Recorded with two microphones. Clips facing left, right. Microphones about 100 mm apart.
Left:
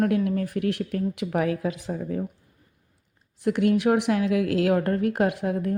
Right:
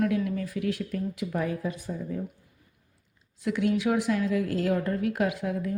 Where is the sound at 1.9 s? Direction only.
60° left (ahead or behind).